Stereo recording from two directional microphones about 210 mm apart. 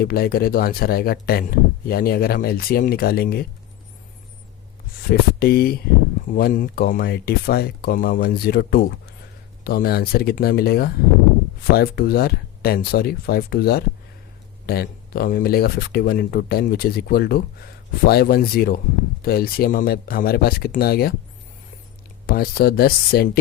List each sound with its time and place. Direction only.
0.0 s speech: 45° left (ahead or behind)
5.0 s speech: 45° left (ahead or behind)
22.3 s speech: 45° left (ahead or behind)